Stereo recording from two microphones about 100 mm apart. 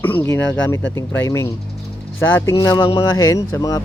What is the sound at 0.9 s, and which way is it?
Speech, 25° left (ahead or behind).